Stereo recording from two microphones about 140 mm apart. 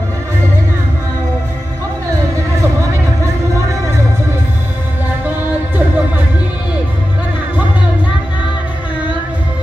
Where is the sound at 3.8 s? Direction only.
20° right (ahead or behind).